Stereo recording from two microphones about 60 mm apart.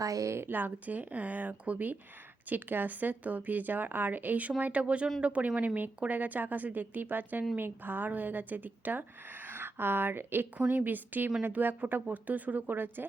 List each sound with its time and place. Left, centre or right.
0.0 s a woman's voice: right
0.3 s a woman's voice: right